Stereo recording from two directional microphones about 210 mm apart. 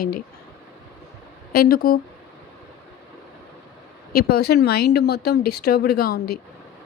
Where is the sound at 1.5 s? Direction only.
45° left (ahead or behind).